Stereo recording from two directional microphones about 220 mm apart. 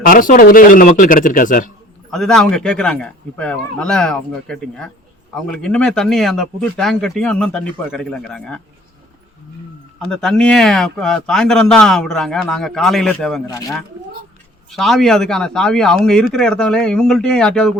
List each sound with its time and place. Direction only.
0.0 s a man's voice: 40° left (ahead or behind)
2.0 s speech: centre (ahead or behind)
10.0 s speech: centre (ahead or behind)
14.7 s speech: centre (ahead or behind)